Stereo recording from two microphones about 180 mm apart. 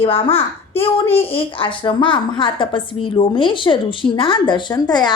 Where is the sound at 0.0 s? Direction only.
30° left (ahead or behind).